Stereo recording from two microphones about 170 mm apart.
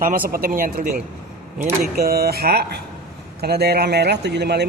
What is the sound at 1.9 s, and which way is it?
Speech, 65° right (ahead or behind).